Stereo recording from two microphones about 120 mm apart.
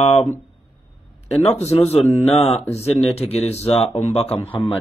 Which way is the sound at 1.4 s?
65° left (ahead or behind).